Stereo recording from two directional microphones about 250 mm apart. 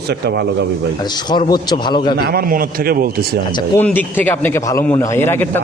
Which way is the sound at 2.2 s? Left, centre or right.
Right.